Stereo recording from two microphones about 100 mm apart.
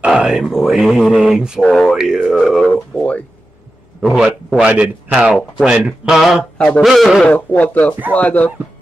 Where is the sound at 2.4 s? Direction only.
5° left (ahead or behind).